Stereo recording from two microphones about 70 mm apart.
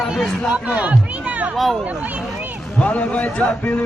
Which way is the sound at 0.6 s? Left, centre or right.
Centre.